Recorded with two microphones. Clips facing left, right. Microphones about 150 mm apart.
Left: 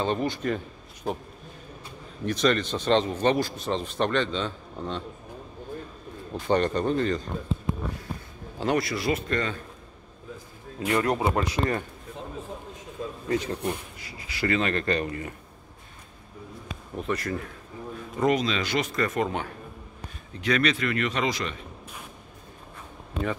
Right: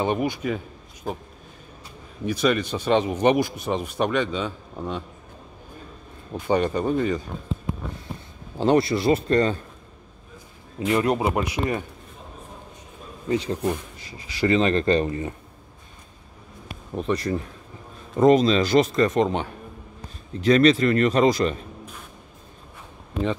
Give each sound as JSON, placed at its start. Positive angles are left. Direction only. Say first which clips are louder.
{"t": 0.0, "sound": "speech", "louder": "right 3 dB", "side_deg": -15}
{"t": 2.2, "sound": "speech", "louder": "right 2 dB", "side_deg": -5}
{"t": 6.3, "sound": "speech", "louder": "right 2 dB", "side_deg": -10}
{"t": 8.5, "sound": "speech", "louder": "right 7 dB", "side_deg": -30}
{"t": 10.9, "sound": "speech", "louder": "right 3 dB", "side_deg": -20}
{"t": 13.3, "sound": "speech", "louder": "right 4 dB", "side_deg": -15}
{"t": 14.4, "sound": "speech", "louder": "right 6 dB", "side_deg": -25}
{"t": 17.0, "sound": "a man's voice", "louder": "right 5 dB", "side_deg": -30}
{"t": 20.3, "sound": "a man's voice", "louder": "right 8 dB", "side_deg": -35}